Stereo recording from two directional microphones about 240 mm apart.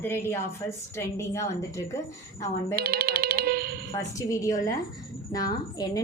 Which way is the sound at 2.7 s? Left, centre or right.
Right.